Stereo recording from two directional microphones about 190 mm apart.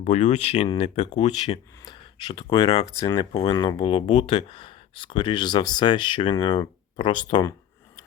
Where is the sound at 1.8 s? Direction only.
25° left (ahead or behind).